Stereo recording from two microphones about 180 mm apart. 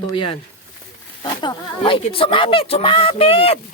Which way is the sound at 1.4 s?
25° left (ahead or behind).